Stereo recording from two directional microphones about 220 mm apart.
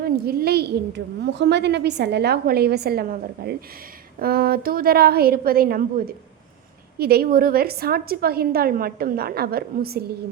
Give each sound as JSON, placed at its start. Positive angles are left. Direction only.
{"t": 0.0, "sound": "a woman's voice", "side_deg": -45}